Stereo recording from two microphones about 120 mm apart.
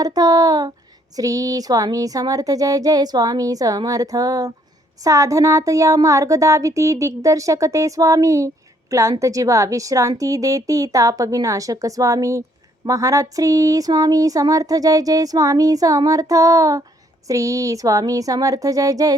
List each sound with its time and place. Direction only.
0.0 s speech: 30° right (ahead or behind)